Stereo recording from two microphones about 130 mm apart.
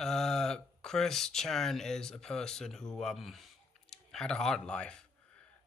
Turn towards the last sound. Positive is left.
turn(degrees=10)  # may be behind; listen again after turning